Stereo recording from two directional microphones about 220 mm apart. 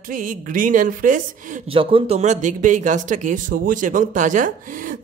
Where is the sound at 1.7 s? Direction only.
25° right (ahead or behind).